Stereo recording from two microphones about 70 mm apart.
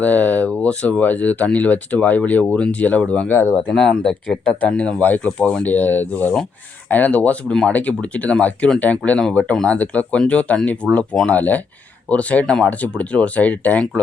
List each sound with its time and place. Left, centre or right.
0.0 s speech: left
3.3 s speech: left
3.7 s speech: centre
10.8 s speech: centre
11.3 s speech: left